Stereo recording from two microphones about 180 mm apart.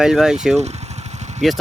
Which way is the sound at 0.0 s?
5° right (ahead or behind).